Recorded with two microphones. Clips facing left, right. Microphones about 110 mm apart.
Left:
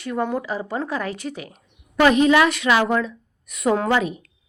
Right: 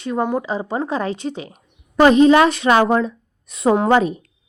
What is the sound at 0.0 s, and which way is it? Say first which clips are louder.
A woman's voice: right 3 dB; 20° right (ahead or behind).